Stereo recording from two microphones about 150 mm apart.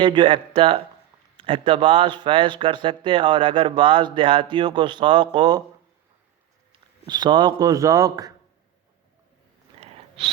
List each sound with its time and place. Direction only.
0.0 s speech: 35° right (ahead or behind)
7.1 s a man's voice: 30° right (ahead or behind)
9.8 s a sound: 40° right (ahead or behind)